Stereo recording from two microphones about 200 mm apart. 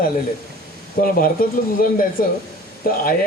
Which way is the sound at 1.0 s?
45° left (ahead or behind).